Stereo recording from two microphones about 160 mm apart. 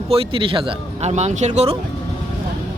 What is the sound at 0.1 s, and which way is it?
Speech, 35° right (ahead or behind).